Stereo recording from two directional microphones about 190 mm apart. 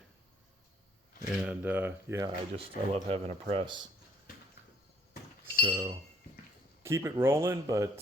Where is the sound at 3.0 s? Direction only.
30° right (ahead or behind).